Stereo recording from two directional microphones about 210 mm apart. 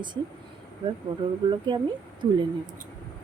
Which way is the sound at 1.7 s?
20° right (ahead or behind).